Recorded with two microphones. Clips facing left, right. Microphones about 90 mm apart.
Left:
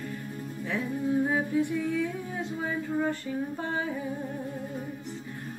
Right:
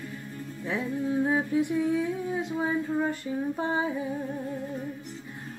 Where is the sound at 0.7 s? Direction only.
15° right (ahead or behind).